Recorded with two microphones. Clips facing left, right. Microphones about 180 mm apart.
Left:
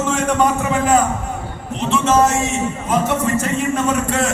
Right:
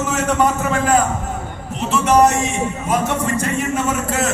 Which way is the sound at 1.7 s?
10° right (ahead or behind).